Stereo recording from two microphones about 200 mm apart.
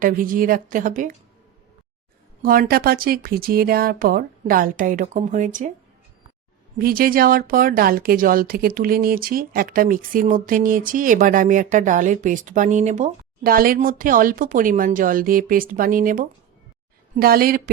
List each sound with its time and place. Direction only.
0.0 s speech: 45° right (ahead or behind)
2.4 s speech: 45° right (ahead or behind)
6.7 s speech: 50° right (ahead or behind)